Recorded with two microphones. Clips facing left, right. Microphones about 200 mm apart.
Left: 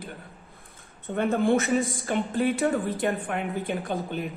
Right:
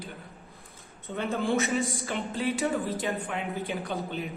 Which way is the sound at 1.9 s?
50° left (ahead or behind).